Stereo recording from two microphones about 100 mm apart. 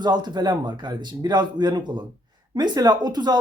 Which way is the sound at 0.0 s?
45° right (ahead or behind).